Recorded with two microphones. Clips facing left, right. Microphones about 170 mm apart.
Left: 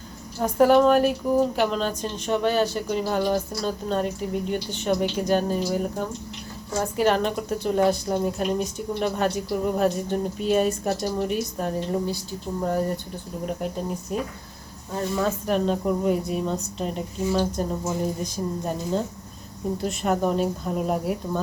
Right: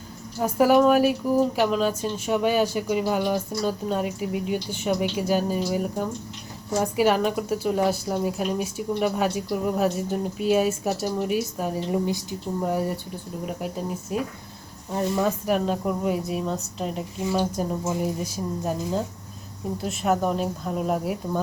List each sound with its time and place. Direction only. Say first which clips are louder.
0.3 s a woman's voice: left 1 dB; 5° right (ahead or behind)